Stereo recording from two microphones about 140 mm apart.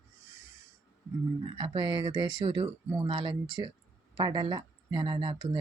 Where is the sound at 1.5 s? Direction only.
35° right (ahead or behind).